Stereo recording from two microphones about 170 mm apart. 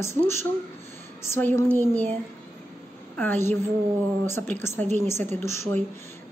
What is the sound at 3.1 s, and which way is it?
A woman's voice, 10° left (ahead or behind).